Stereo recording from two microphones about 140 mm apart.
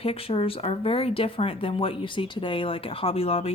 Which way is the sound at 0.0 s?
45° left (ahead or behind).